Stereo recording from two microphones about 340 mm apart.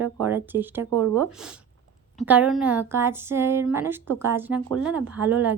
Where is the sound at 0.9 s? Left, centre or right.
Right.